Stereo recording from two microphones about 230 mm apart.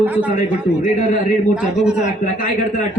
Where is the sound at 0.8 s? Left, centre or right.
Left.